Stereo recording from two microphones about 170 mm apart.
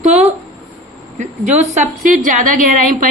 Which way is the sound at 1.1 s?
45° right (ahead or behind).